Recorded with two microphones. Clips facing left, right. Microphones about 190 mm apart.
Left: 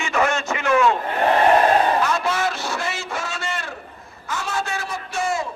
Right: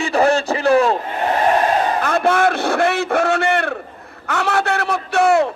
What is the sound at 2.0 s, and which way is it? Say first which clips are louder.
A man's voice: right 6 dB; 55° right (ahead or behind).